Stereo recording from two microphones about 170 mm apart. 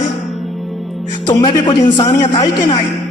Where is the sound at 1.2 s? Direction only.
25° left (ahead or behind).